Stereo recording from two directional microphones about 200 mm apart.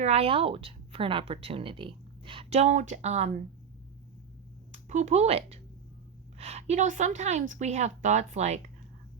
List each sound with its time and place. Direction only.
0.0 s a woman's voice: 30° right (ahead or behind)
4.7 s a woman's voice: 35° right (ahead or behind)